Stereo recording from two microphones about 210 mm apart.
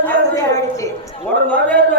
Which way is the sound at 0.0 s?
10° left (ahead or behind).